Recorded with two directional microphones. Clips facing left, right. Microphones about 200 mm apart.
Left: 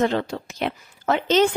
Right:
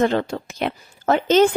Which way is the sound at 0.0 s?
50° right (ahead or behind).